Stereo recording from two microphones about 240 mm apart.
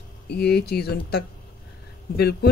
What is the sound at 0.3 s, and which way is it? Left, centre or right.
Speech, left.